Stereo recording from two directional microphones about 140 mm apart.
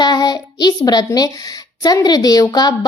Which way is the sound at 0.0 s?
30° left (ahead or behind).